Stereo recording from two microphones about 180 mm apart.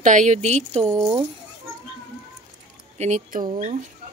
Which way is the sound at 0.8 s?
15° right (ahead or behind).